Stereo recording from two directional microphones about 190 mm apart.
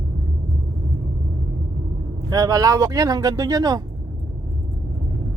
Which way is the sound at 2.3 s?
20° right (ahead or behind).